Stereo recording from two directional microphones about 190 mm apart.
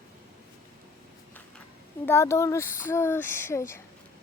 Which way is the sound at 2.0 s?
15° left (ahead or behind).